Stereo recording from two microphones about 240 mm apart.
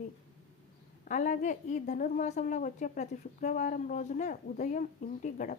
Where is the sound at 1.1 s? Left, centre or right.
Left.